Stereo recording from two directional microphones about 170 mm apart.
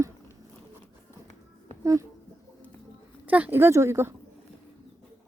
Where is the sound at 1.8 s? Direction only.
20° right (ahead or behind).